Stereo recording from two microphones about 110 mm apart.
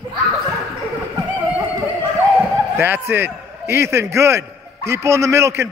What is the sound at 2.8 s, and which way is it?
A man's voice, 20° right (ahead or behind).